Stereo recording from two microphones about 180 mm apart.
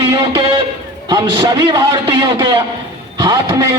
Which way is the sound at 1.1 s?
20° right (ahead or behind).